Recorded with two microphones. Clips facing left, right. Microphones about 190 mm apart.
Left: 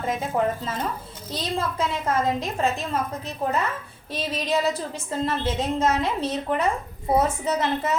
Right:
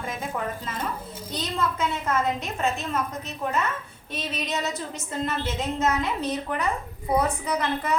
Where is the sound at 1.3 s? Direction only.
30° left (ahead or behind).